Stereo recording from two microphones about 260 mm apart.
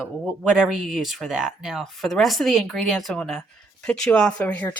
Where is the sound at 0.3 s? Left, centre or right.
Centre.